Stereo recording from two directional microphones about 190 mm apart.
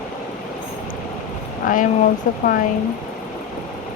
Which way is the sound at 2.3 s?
45° left (ahead or behind).